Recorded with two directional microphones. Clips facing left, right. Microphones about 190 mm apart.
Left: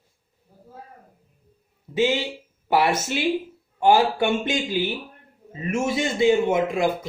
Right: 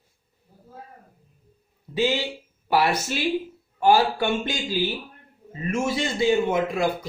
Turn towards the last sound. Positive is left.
turn(degrees=20)  # may be behind; listen again after turning